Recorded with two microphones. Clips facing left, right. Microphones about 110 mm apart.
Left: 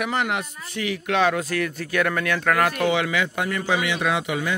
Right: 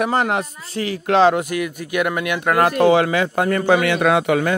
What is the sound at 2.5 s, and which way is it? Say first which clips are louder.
A man's voice: right 11 dB; 30° right (ahead or behind).